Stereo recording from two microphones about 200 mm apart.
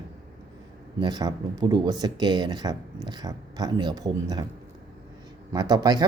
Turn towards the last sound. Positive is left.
turn(degrees=-20)  # may be behind; listen again after turning